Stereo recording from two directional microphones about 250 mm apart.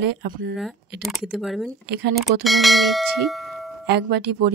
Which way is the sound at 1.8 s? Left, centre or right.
Right.